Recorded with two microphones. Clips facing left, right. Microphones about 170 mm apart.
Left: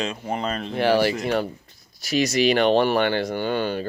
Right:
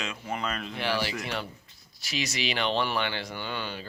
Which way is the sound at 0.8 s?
50° left (ahead or behind).